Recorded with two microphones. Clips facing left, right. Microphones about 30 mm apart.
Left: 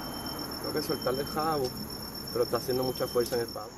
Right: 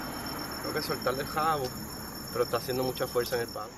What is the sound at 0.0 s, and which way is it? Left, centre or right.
Vehicle, right.